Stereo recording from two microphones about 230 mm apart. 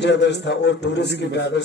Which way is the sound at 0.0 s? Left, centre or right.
Left.